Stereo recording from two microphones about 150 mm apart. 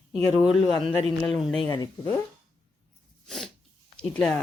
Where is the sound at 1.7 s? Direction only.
25° left (ahead or behind).